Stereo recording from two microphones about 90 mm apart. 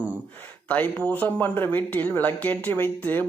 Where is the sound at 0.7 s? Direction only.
15° left (ahead or behind).